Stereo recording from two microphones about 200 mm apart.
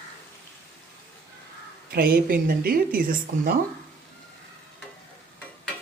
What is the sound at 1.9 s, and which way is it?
Speech, 50° right (ahead or behind).